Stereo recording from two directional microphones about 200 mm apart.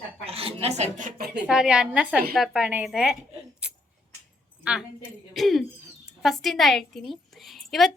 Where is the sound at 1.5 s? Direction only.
5° right (ahead or behind).